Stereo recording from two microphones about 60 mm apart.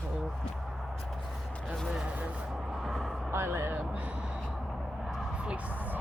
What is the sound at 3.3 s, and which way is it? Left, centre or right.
Speech, right.